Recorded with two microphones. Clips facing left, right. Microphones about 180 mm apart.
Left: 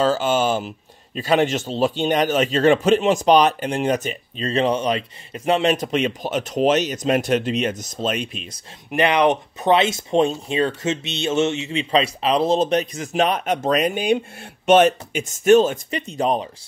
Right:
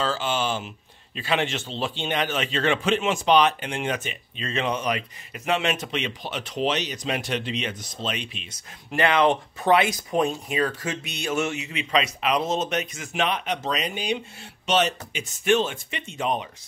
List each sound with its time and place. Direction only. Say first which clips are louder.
0.0 s speech: left 7 dB; 45° left (ahead or behind)
8.9 s speech: left 3 dB; 20° left (ahead or behind); by 16.4 s 35° left (ahead or behind)